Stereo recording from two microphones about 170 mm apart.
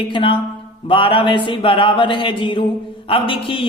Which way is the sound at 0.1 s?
30° left (ahead or behind).